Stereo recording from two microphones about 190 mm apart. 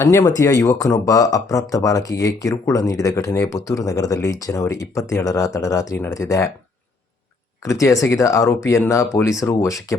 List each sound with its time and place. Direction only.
0.0 s speech: 15° left (ahead or behind)
7.6 s speech: 15° left (ahead or behind)